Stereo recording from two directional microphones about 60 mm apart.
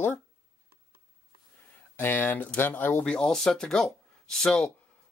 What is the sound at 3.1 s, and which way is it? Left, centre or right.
Speech, centre.